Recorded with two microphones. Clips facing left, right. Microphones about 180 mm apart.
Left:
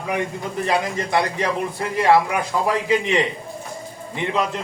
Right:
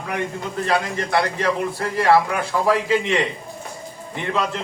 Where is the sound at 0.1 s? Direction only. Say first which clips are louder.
Left 1 dB; 15° left (ahead or behind).